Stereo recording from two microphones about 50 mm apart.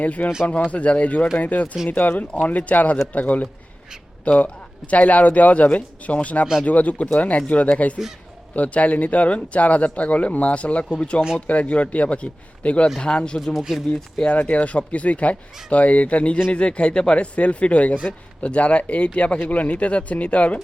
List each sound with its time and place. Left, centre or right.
0.0 s speech: left
13.4 s speech: centre
13.9 s speech: centre